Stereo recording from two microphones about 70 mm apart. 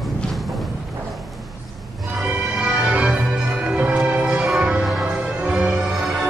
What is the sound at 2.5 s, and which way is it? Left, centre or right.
Music, centre.